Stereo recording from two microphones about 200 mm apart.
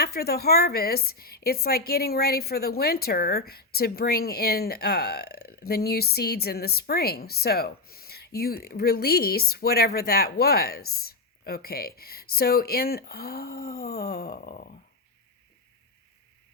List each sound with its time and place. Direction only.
0.0 s a woman's voice: 50° left (ahead or behind)